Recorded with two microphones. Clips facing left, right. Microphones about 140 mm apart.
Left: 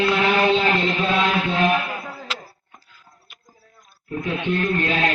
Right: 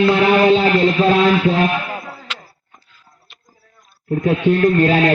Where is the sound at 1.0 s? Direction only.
35° right (ahead or behind).